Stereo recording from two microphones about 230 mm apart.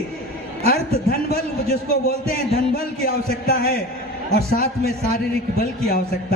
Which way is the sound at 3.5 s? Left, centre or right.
Left.